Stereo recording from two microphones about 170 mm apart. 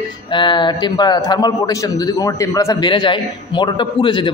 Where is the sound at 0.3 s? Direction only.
25° left (ahead or behind).